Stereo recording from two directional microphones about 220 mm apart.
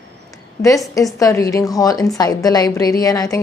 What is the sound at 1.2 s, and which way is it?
A woman's voice, 15° left (ahead or behind).